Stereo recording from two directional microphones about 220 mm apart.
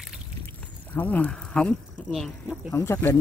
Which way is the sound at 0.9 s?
5° left (ahead or behind).